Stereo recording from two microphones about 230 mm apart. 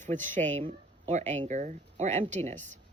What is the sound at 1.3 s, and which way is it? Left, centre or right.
Speech, right.